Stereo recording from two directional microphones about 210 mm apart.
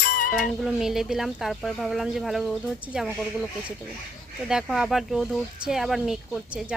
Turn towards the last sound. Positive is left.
turn(degrees=0)  # may be behind; listen again after turning